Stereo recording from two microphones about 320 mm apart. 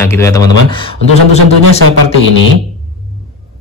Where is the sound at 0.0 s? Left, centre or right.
Centre.